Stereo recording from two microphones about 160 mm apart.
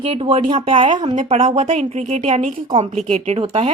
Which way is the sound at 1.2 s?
50° right (ahead or behind).